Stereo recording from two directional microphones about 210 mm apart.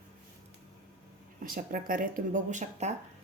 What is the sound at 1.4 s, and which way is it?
A woman's voice, 40° right (ahead or behind).